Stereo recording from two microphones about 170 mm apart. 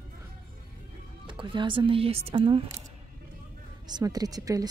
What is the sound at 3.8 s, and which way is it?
Speech, 25° right (ahead or behind).